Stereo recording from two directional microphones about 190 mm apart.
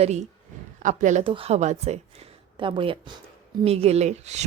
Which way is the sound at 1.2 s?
30° right (ahead or behind).